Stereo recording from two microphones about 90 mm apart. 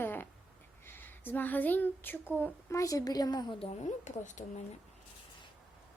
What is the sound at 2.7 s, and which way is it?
Speech, 40° left (ahead or behind).